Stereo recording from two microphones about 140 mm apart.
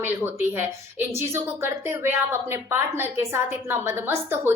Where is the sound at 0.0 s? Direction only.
15° right (ahead or behind).